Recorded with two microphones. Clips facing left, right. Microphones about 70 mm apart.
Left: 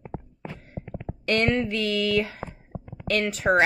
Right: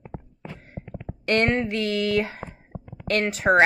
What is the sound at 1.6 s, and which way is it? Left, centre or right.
Speech, right.